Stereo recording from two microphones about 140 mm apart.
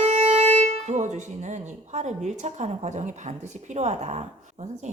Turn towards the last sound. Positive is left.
turn(degrees=-55)  # may be behind; listen again after turning